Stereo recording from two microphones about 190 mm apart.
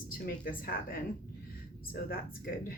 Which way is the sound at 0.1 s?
50° left (ahead or behind).